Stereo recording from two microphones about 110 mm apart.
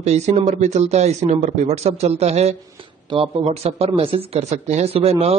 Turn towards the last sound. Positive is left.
turn(degrees=-65)  # may be behind; listen again after turning